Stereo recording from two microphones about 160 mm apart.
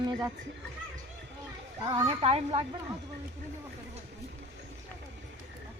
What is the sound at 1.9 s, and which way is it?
Speech, 25° right (ahead or behind).